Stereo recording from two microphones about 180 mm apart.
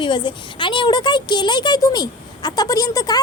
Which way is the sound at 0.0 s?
25° left (ahead or behind).